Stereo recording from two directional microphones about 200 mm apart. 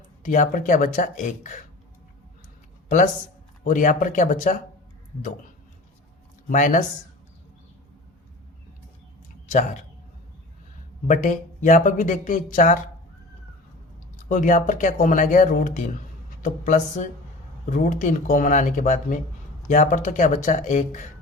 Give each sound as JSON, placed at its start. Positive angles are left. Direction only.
{"t": 0.3, "sound": "speech", "side_deg": 40}
{"t": 3.6, "sound": "speech", "side_deg": 40}
{"t": 6.5, "sound": "speech", "side_deg": 40}
{"t": 11.1, "sound": "speech", "side_deg": 40}
{"t": 14.3, "sound": "speech", "side_deg": 40}